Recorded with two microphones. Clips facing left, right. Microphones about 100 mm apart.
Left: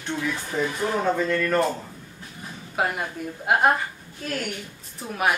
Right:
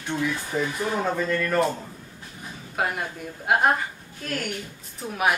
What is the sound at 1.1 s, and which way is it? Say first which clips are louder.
Speech: left 1 dB; centre (ahead or behind).